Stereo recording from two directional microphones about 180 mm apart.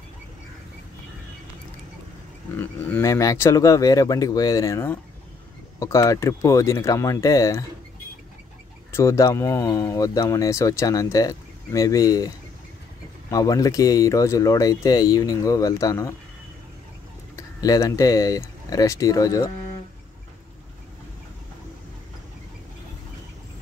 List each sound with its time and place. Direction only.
2.8 s speech: 15° left (ahead or behind)
8.9 s speech: 15° left (ahead or behind)
13.3 s speech: 20° left (ahead or behind)
17.6 s speech: 20° left (ahead or behind)